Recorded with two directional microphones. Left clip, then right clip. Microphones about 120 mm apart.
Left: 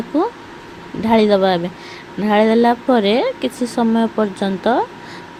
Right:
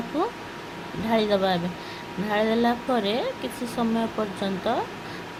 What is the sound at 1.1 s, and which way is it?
Speech, 55° left (ahead or behind).